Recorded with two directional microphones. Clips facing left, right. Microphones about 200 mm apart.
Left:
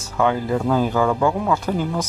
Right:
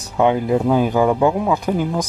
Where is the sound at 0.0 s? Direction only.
20° right (ahead or behind).